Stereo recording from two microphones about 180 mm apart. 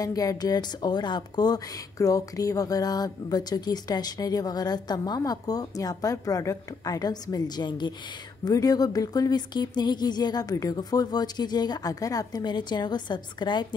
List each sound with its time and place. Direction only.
0.0 s speech: 20° left (ahead or behind)